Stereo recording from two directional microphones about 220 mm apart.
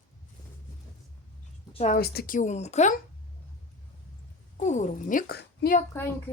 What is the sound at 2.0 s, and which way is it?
A woman's voice, 40° left (ahead or behind).